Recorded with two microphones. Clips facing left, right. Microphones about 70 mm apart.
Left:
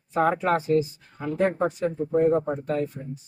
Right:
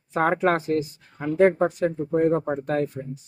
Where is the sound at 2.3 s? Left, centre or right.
Right.